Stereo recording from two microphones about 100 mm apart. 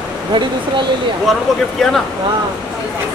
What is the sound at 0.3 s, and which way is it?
Speech, 50° right (ahead or behind).